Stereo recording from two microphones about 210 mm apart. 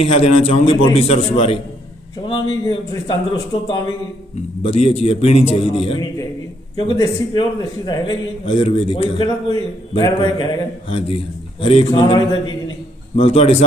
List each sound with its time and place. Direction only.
0.0 s a man's voice: 30° left (ahead or behind)
2.6 s a man's voice: 20° left (ahead or behind)